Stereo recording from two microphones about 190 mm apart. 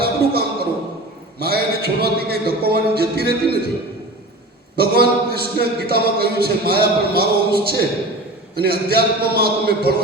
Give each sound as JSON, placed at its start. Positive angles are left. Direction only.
{"t": 0.0, "sound": "a sound", "side_deg": -55}
{"t": 1.4, "sound": "a man's voice", "side_deg": -55}
{"t": 4.8, "sound": "speech", "side_deg": -55}